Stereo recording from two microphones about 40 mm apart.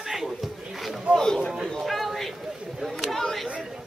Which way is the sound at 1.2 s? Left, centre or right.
Centre.